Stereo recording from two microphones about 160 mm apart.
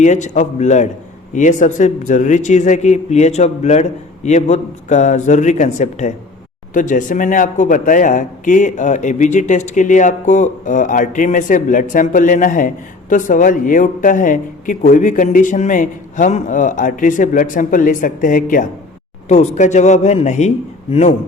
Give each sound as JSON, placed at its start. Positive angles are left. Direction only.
{"t": 0.0, "sound": "a man's voice", "side_deg": 50}